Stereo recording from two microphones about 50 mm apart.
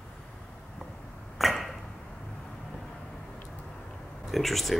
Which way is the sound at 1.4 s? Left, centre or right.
Centre.